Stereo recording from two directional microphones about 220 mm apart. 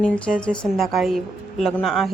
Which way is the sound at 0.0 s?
5° left (ahead or behind).